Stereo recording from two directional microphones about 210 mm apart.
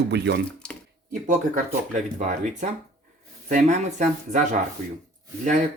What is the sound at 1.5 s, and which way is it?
Speech, 35° right (ahead or behind).